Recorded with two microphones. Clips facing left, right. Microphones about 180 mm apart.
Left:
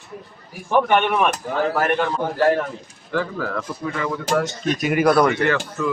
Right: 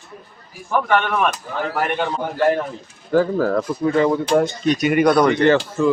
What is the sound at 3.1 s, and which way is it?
Speech, 40° right (ahead or behind).